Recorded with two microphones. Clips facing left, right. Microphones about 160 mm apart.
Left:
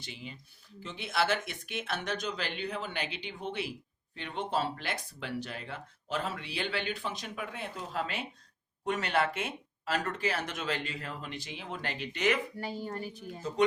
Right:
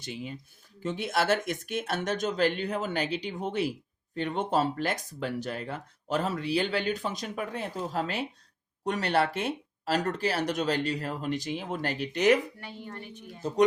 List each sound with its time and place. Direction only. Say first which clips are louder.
0.0 s speech: right 7 dB; 50° right (ahead or behind)
12.5 s a woman's voice: left 5 dB; 35° left (ahead or behind)